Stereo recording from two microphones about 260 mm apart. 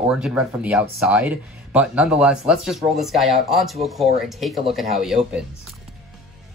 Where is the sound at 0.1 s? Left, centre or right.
Centre.